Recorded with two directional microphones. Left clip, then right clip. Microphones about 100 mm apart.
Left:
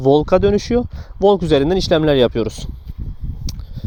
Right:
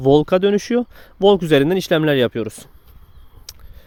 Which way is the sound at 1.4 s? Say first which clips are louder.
Even; 10° right (ahead or behind).